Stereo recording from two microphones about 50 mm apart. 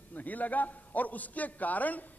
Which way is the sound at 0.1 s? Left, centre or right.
Left.